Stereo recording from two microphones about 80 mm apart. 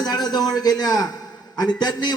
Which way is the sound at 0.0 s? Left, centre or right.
Left.